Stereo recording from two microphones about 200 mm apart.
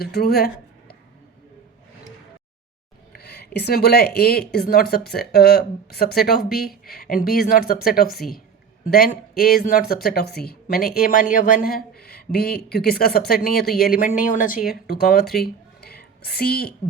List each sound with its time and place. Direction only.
0.0 s speech: 50° left (ahead or behind)
3.2 s speech: 50° left (ahead or behind)
8.1 s a woman's voice: centre (ahead or behind)
8.9 s speech: 50° left (ahead or behind)
15.4 s a sound: 50° left (ahead or behind)